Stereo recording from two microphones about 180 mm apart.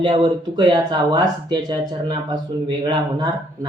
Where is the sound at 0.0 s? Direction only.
25° right (ahead or behind).